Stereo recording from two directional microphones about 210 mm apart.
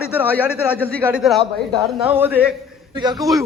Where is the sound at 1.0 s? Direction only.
5° right (ahead or behind).